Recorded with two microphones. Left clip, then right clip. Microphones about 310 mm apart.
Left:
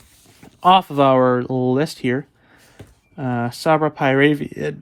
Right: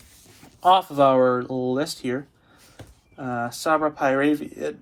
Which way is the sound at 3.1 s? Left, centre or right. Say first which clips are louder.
Left 4 dB; left.